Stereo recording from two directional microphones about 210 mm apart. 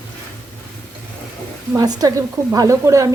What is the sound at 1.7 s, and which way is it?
Speech, 15° right (ahead or behind).